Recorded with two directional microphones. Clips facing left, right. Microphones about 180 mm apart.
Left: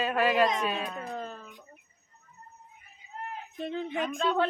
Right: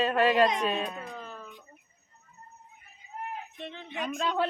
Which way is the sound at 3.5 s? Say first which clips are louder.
Left 11 dB; 40° left (ahead or behind).